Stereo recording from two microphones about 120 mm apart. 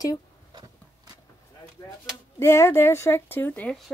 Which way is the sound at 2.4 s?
20° left (ahead or behind).